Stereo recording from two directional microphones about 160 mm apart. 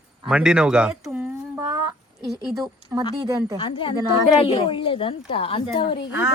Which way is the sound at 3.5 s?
30° left (ahead or behind).